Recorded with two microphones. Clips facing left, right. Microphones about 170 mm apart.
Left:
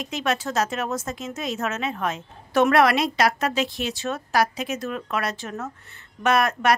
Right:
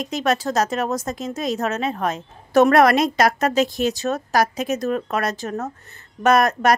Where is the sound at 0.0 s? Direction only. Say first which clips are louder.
Right 4 dB; 40° right (ahead or behind).